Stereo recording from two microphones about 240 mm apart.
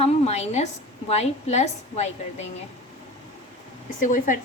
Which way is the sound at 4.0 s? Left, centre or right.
Left.